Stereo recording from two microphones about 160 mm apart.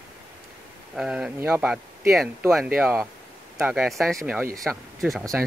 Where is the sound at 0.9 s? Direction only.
5° right (ahead or behind).